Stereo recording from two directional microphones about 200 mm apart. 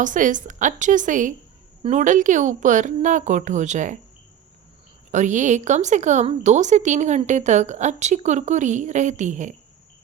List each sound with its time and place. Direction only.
0.0 s a woman's voice: 40° right (ahead or behind)
5.1 s a woman's voice: 35° right (ahead or behind)